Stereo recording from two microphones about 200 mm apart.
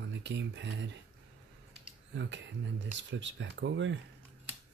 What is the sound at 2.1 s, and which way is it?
Speech, 65° right (ahead or behind).